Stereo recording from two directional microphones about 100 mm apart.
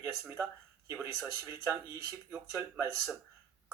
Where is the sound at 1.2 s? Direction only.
30° right (ahead or behind).